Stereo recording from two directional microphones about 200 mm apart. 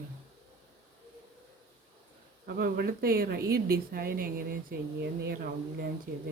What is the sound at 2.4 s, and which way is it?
Speech, 50° right (ahead or behind).